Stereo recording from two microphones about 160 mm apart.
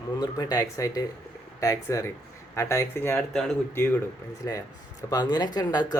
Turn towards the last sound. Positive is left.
turn(degrees=25)  # may be behind; listen again after turning